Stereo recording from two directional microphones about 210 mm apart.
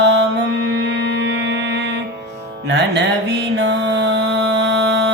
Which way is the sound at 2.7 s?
55° right (ahead or behind).